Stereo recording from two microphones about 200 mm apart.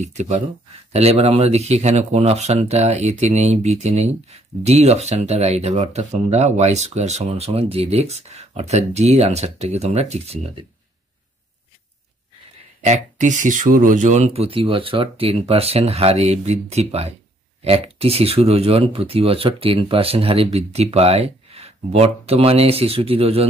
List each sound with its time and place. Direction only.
0.0 s speech: 35° right (ahead or behind)
12.8 s speech: 35° right (ahead or behind)